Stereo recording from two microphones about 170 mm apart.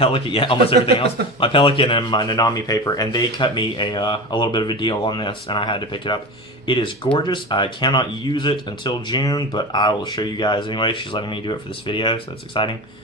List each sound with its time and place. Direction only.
0.0 s speech: 30° left (ahead or behind)